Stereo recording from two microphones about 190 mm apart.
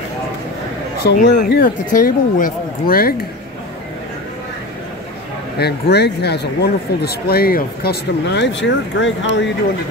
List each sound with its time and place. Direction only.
1.0 s speech: 55° left (ahead or behind)
5.6 s speech: 60° left (ahead or behind)